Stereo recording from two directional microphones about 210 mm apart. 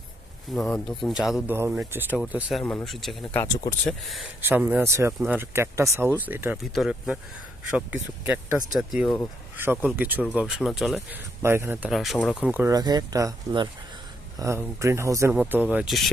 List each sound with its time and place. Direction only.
0.5 s speech: centre (ahead or behind)
3.4 s speech: 15° left (ahead or behind)
3.8 s speech: centre (ahead or behind)